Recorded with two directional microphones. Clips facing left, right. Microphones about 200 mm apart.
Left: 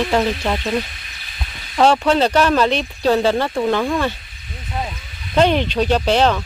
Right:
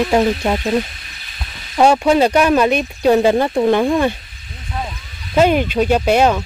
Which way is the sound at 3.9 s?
15° right (ahead or behind).